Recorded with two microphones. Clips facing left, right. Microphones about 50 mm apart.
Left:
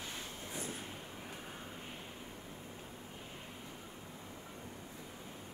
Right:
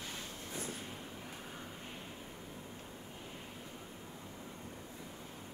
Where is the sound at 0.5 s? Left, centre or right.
Centre.